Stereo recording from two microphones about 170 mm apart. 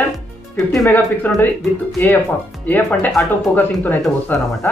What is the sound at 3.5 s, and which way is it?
Speech, 10° left (ahead or behind).